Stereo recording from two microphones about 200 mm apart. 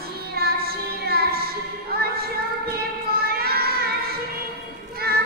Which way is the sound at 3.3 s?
50° right (ahead or behind).